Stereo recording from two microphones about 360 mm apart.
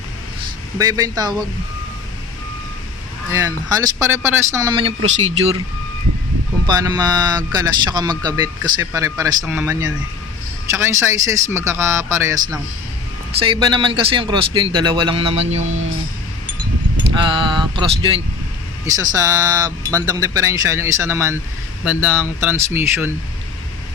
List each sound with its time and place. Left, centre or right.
0.8 s speech: centre
3.3 s speech: centre
6.7 s speech: centre
8.1 s speech: centre
8.4 s speech: centre
15.6 s speech: right
17.2 s a sound: centre
18.9 s speech: centre